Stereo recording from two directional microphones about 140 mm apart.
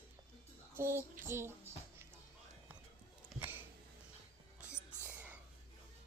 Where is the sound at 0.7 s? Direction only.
15° right (ahead or behind).